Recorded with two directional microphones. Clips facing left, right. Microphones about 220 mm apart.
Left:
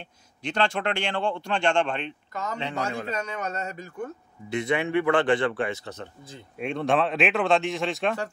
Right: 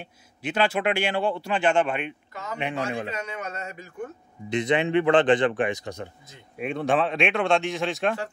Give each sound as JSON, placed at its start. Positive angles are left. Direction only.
{"t": 0.0, "sound": "a man's voice", "side_deg": -5}
{"t": 3.1, "sound": "speech", "side_deg": 40}
{"t": 4.5, "sound": "speech", "side_deg": -20}
{"t": 6.6, "sound": "a man's voice", "side_deg": 0}